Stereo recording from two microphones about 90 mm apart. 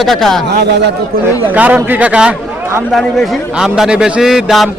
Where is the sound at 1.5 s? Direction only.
15° right (ahead or behind).